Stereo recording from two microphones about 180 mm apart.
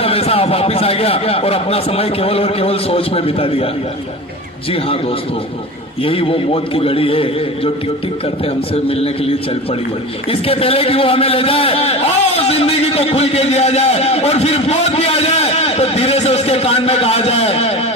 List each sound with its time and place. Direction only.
0.0 s a man's voice: 30° left (ahead or behind)
6.0 s a man's voice: 30° left (ahead or behind)
8.7 s a man's voice: 35° left (ahead or behind)